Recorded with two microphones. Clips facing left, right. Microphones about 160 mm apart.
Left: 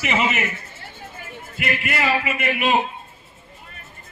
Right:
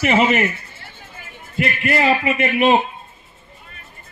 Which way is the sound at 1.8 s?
40° right (ahead or behind).